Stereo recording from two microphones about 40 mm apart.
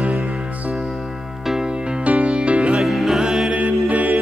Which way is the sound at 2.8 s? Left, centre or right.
Centre.